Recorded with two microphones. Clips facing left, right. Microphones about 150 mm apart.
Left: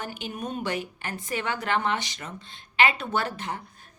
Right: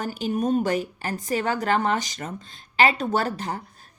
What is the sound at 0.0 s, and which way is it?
A woman's voice, 40° right (ahead or behind).